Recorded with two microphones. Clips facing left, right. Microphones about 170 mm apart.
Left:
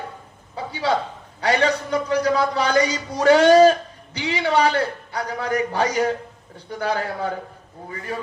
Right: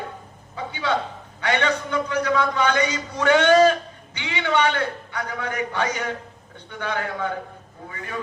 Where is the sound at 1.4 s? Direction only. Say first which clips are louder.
Left 3 dB; 35° left (ahead or behind).